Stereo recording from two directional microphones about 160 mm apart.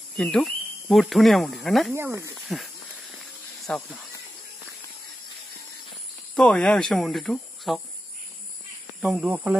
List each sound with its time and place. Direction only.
0.1 s speech: 5° left (ahead or behind)
2.0 s speech: 15° right (ahead or behind)
2.3 s speech: centre (ahead or behind)
6.3 s speech: 5° left (ahead or behind)
9.0 s speech: 5° right (ahead or behind)